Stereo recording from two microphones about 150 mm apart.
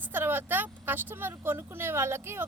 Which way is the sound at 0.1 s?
15° right (ahead or behind).